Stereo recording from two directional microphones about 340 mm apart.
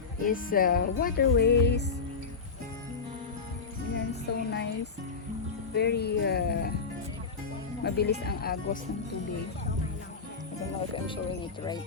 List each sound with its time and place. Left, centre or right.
0.2 s speech: left
4.1 s music: left
5.7 s speech: left
7.9 s speech: left